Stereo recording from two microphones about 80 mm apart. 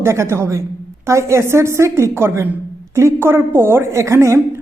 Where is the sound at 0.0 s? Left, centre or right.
Right.